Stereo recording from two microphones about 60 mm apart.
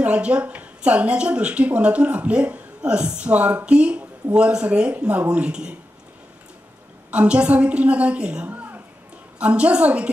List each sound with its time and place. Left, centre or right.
0.0 s speech: centre
7.1 s speech: centre
8.5 s a sound: right
9.4 s speech: centre